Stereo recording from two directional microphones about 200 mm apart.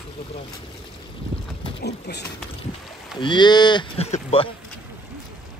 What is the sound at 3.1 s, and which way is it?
Speech, 25° left (ahead or behind).